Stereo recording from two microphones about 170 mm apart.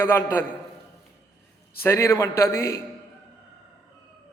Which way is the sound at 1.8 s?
15° left (ahead or behind).